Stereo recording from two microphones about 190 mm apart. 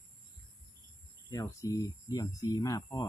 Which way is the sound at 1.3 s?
15° left (ahead or behind).